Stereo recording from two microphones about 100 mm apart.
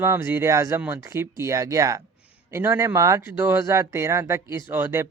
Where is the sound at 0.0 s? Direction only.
25° right (ahead or behind).